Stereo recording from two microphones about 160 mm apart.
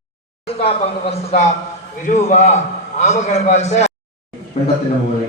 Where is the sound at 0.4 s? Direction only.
35° left (ahead or behind).